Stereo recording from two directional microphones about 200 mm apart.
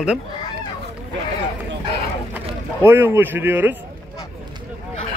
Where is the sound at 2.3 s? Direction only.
10° right (ahead or behind).